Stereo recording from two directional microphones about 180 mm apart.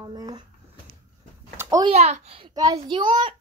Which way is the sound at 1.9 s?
35° right (ahead or behind).